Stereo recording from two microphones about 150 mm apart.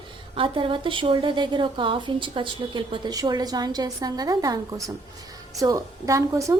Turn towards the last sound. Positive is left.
turn(degrees=-20)  # may be behind; listen again after turning